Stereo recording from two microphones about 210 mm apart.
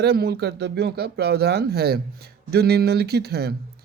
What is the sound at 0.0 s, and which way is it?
Speech, 50° right (ahead or behind).